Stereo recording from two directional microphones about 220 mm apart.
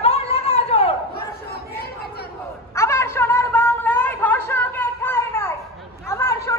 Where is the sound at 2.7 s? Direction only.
10° left (ahead or behind).